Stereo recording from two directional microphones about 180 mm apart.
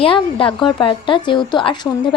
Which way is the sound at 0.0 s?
30° left (ahead or behind).